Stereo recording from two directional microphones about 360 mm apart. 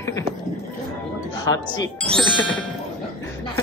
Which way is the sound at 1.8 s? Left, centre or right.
Centre.